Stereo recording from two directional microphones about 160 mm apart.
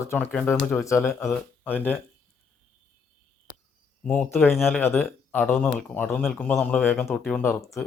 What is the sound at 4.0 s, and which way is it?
Speech, 5° left (ahead or behind).